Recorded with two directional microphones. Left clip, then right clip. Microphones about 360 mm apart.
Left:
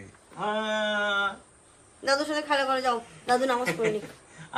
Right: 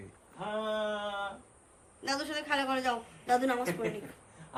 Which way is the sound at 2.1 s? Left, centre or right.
Centre.